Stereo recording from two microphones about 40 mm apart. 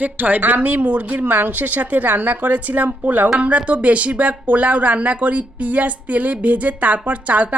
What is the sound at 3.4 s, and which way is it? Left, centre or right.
Speech, right.